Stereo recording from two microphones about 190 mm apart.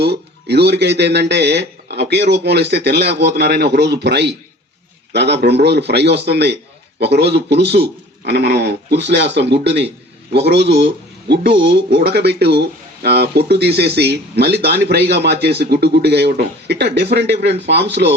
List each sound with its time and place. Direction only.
0.0 s speech: 60° right (ahead or behind)